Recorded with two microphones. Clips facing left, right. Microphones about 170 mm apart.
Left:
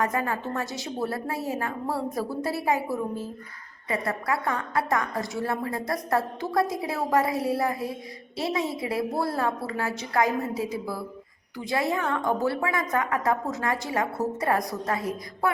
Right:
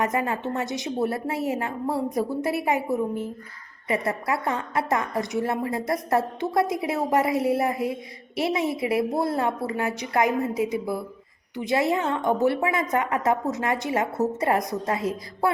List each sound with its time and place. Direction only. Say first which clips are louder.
0.0 s a woman's voice: right 2 dB; 20° right (ahead or behind)